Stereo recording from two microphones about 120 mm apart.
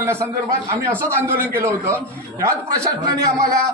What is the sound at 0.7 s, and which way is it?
A man's voice, 20° right (ahead or behind).